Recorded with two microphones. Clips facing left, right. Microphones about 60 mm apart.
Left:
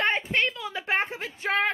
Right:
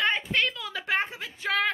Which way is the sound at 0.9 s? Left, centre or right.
Left.